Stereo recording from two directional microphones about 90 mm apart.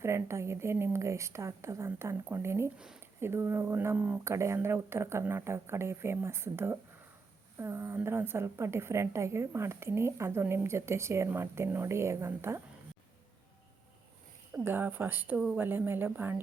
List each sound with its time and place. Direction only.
0.0 s a woman's voice: 30° right (ahead or behind)
2.7 s speech: 10° right (ahead or behind)
3.2 s a woman's voice: 25° right (ahead or behind)
3.9 s speech: 15° right (ahead or behind)
4.2 s a woman's voice: 30° right (ahead or behind)
14.6 s a woman's voice: 25° right (ahead or behind)